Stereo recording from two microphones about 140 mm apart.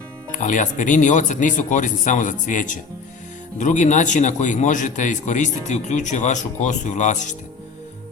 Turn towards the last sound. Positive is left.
turn(degrees=60)  # may be behind; listen again after turning